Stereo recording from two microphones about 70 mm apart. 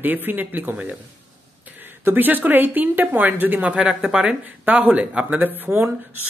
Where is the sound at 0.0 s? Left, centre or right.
Right.